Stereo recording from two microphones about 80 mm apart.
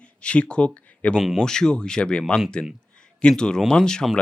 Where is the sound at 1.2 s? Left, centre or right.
Centre.